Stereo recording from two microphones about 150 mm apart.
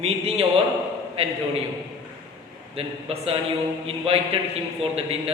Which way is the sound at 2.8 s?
40° right (ahead or behind).